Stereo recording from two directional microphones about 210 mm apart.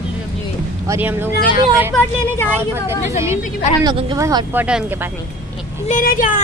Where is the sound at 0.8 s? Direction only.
10° right (ahead or behind).